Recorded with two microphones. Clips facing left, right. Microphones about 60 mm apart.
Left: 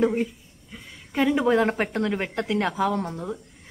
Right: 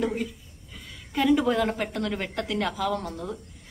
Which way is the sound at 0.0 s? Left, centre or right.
Left.